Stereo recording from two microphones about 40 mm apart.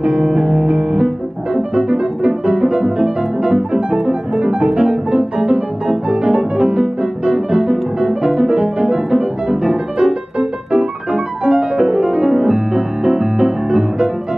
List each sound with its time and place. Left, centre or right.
0.0 s music: right
0.4 s piano: centre
7.7 s music: centre
10.7 s piano: centre